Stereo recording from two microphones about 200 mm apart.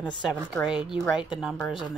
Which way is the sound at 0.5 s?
Centre (ahead or behind).